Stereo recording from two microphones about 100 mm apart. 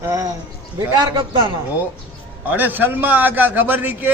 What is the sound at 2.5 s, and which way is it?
A man's voice, 20° right (ahead or behind).